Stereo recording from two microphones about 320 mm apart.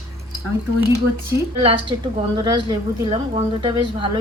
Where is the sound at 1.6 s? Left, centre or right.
Centre.